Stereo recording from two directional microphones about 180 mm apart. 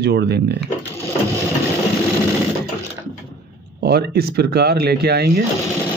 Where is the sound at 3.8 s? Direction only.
60° right (ahead or behind).